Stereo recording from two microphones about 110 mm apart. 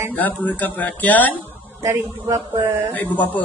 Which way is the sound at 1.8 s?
30° right (ahead or behind).